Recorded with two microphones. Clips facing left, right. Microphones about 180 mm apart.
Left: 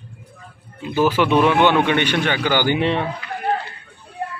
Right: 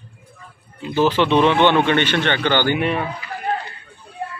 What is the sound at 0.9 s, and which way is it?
Speech, 10° left (ahead or behind).